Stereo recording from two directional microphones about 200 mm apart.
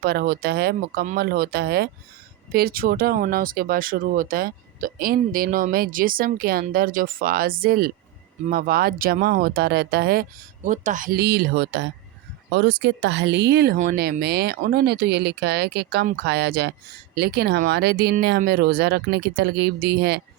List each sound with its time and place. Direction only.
0.0 s speech: 50° right (ahead or behind)
10.7 s speech: 40° right (ahead or behind)